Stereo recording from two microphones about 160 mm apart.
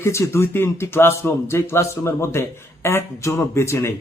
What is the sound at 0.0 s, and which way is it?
Speech, 15° left (ahead or behind).